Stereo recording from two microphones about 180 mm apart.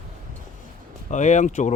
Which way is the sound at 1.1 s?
40° left (ahead or behind).